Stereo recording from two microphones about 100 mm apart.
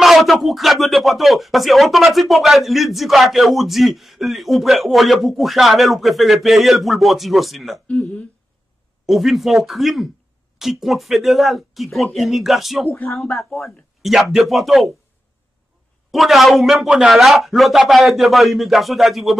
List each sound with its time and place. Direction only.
0.0 s speech: centre (ahead or behind)
7.9 s speech: 10° left (ahead or behind)
9.0 s speech: centre (ahead or behind)
12.9 s speech: 25° left (ahead or behind)
13.2 s speech: centre (ahead or behind)
16.1 s speech: centre (ahead or behind)